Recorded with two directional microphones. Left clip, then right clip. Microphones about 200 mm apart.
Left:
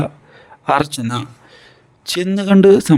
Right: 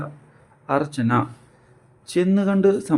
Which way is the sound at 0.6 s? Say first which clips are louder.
Left 7 dB; 45° left (ahead or behind).